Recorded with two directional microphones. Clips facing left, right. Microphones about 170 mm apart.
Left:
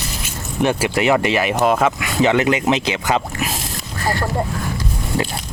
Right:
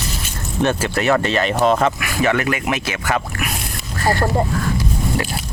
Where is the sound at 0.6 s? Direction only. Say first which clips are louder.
Left 1 dB; 15° left (ahead or behind).